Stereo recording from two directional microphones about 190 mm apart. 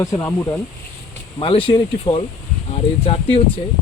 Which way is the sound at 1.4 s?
30° left (ahead or behind).